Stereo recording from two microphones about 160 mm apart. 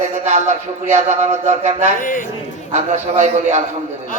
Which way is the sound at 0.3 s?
50° right (ahead or behind).